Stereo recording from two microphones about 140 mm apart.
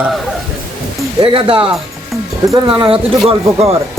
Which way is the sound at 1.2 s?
40° right (ahead or behind).